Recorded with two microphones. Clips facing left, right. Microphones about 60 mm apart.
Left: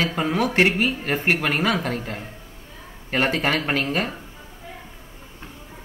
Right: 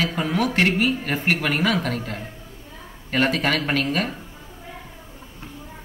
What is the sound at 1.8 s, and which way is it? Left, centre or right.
Speech, left.